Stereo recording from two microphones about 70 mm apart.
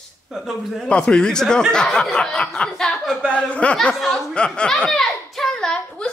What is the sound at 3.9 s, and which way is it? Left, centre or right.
A man's voice, centre.